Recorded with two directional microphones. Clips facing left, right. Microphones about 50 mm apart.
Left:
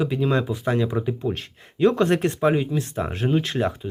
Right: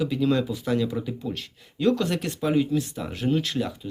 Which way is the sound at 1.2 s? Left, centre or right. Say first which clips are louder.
Left 5 dB; left.